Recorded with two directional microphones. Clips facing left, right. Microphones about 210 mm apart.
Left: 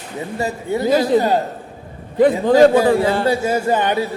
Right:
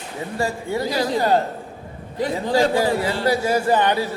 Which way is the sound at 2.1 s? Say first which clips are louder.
Left 9 dB; 55° left (ahead or behind).